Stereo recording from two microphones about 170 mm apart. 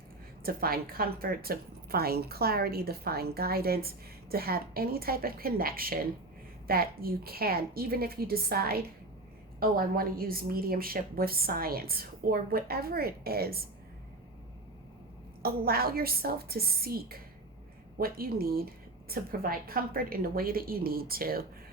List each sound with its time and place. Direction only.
0.4 s a woman's voice: 60° right (ahead or behind)
15.4 s a woman's voice: 60° right (ahead or behind)